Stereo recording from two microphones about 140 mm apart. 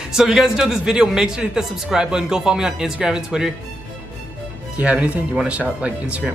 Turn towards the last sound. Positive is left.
turn(degrees=-10)  # may be behind; listen again after turning